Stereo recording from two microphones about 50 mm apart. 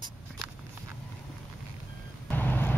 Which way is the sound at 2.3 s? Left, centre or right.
Left.